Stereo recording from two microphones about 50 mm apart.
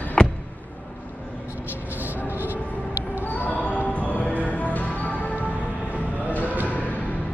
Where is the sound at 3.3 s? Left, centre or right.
Left.